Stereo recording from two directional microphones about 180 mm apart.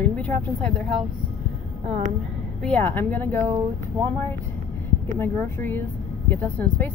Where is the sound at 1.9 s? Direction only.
40° right (ahead or behind).